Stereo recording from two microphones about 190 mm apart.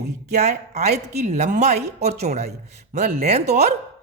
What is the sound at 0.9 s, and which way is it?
A woman's voice, 40° right (ahead or behind).